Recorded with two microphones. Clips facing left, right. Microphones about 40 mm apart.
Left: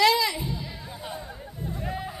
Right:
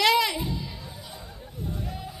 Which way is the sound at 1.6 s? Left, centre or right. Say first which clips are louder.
Left 3 dB; left.